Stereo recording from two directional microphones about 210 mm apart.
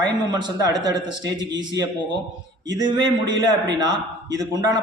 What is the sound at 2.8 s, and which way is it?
Speech, 20° right (ahead or behind).